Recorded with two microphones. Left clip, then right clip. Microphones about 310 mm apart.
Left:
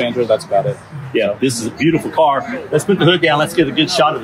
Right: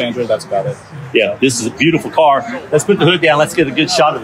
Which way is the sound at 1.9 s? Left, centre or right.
Right.